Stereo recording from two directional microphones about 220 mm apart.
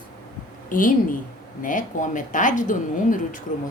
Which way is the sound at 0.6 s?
40° left (ahead or behind).